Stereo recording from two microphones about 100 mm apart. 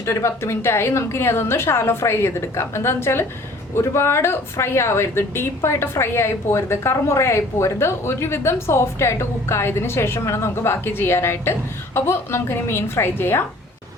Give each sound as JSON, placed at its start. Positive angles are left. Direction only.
{"t": 0.0, "sound": "speech", "side_deg": 30}